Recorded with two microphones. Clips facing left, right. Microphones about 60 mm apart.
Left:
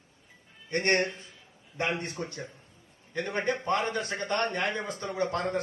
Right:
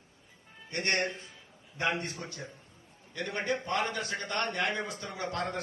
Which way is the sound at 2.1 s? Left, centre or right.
Left.